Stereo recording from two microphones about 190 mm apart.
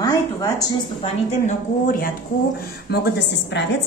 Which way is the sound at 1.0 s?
45° left (ahead or behind).